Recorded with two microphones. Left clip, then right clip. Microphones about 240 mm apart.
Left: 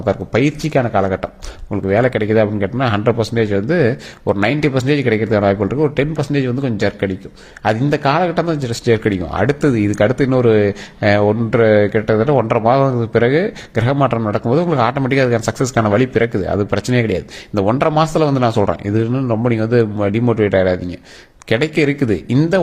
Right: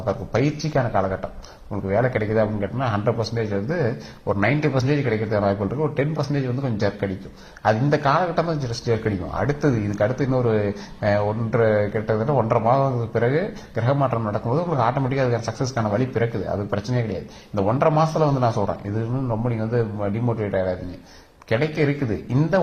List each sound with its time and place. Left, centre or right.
0.0 s a man's voice: left
21.5 s a man's voice: left